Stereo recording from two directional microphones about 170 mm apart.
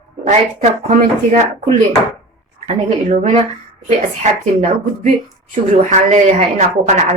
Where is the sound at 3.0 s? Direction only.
45° right (ahead or behind).